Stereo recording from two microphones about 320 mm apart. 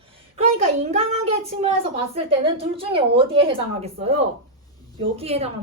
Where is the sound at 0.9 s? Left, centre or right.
Centre.